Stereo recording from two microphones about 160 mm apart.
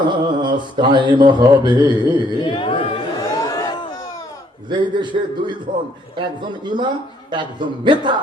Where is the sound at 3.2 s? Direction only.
20° left (ahead or behind).